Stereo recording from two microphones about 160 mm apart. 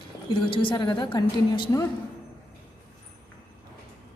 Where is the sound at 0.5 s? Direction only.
30° left (ahead or behind).